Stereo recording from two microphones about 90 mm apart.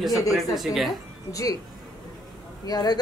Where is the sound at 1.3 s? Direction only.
40° left (ahead or behind).